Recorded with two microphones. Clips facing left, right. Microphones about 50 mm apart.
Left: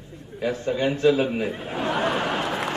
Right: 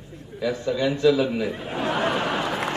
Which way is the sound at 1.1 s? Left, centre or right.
Left.